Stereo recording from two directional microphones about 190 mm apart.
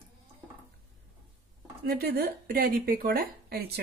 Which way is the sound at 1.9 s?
55° right (ahead or behind).